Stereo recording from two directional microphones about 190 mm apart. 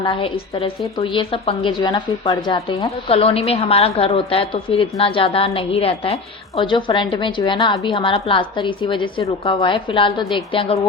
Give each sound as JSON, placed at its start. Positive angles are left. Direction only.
{"t": 0.0, "sound": "a woman's voice", "side_deg": 30}
{"t": 3.1, "sound": "a woman's voice", "side_deg": 30}